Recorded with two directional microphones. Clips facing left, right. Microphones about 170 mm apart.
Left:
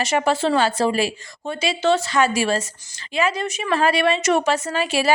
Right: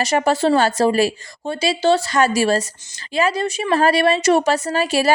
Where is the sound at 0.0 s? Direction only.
40° right (ahead or behind).